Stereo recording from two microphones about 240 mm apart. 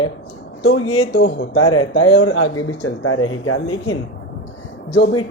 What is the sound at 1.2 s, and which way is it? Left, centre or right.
Speech, left.